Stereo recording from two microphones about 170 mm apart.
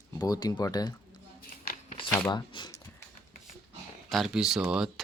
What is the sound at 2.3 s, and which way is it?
Speech, 25° left (ahead or behind).